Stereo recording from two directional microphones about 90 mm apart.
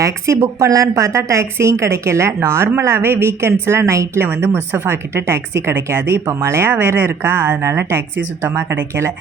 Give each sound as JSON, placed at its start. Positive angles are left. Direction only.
{"t": 0.0, "sound": "speech", "side_deg": -30}